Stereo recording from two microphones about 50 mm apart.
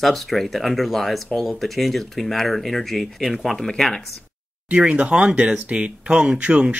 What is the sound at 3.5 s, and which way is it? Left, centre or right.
Speech, centre.